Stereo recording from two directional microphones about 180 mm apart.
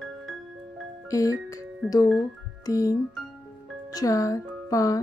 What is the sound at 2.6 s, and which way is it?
Speech, 20° left (ahead or behind).